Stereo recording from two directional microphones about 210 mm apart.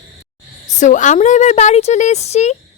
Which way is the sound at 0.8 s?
35° left (ahead or behind).